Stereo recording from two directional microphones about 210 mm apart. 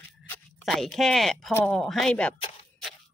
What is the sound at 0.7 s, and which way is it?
Speech, centre (ahead or behind).